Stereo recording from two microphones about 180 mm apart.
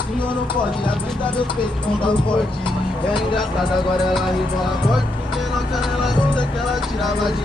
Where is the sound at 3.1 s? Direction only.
25° left (ahead or behind).